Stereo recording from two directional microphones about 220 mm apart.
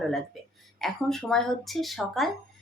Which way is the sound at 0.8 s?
Centre (ahead or behind).